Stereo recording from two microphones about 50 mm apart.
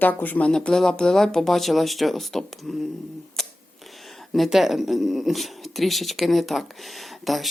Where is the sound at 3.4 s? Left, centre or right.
Centre.